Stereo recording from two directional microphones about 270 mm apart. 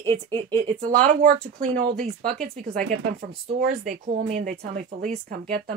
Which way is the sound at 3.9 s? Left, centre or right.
Right.